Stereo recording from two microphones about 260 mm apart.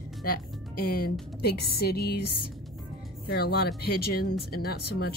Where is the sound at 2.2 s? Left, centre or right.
Left.